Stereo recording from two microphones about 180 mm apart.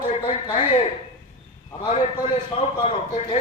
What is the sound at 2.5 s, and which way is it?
Speech, 35° left (ahead or behind).